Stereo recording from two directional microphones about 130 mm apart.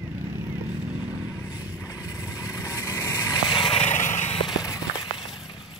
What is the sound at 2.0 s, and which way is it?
Vehicle, 20° left (ahead or behind).